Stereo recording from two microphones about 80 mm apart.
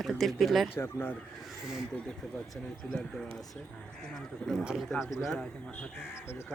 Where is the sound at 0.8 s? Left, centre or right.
Left.